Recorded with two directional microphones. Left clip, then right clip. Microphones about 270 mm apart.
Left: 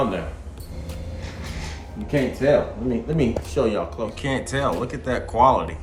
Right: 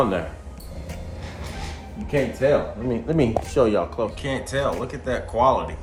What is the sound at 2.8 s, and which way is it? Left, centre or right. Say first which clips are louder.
Speech: right 1 dB; right.